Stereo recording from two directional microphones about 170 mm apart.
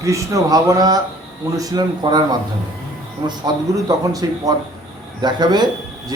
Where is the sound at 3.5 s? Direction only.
25° right (ahead or behind).